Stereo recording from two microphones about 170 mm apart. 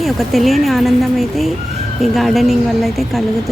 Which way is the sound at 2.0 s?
Centre (ahead or behind).